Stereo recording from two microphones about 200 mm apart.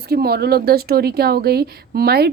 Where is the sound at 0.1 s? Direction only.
50° right (ahead or behind).